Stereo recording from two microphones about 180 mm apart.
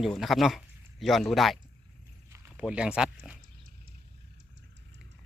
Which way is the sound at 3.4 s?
50° right (ahead or behind).